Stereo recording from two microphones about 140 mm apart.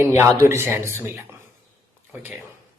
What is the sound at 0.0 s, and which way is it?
A man's voice, 20° right (ahead or behind).